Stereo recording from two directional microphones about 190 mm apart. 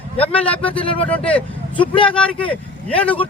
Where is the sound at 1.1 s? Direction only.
5° left (ahead or behind).